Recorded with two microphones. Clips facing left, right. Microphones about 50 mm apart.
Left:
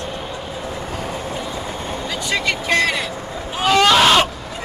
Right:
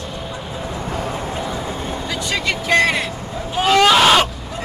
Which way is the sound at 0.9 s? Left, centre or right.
Right.